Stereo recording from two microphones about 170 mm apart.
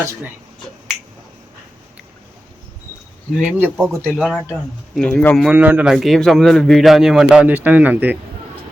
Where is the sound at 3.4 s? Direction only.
5° right (ahead or behind).